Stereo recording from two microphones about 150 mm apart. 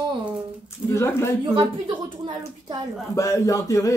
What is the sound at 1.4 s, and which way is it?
A woman's voice, 30° right (ahead or behind).